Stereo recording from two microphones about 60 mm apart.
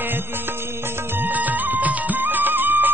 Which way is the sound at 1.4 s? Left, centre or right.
Right.